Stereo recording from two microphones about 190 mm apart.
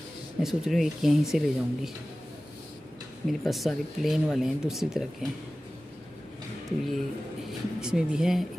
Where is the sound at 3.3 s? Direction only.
Centre (ahead or behind).